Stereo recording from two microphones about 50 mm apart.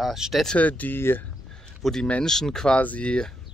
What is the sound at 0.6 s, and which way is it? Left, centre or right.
Speech, left.